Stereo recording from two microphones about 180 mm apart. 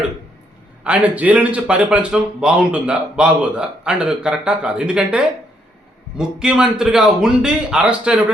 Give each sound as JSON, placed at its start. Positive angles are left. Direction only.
{"t": 0.9, "sound": "speech", "side_deg": -10}